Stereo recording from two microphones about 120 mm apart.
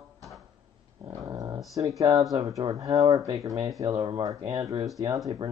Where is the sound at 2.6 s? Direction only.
30° right (ahead or behind).